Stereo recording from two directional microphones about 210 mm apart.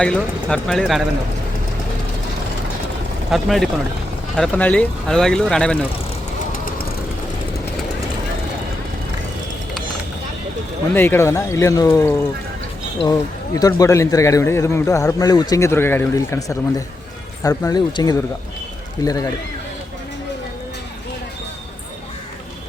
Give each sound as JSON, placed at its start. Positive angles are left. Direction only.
{"t": 0.0, "sound": "speech", "side_deg": 5}
{"t": 3.2, "sound": "speech", "side_deg": 0}
{"t": 10.9, "sound": "speech", "side_deg": 10}